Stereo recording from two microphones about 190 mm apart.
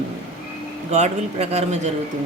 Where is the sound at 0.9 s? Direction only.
35° right (ahead or behind).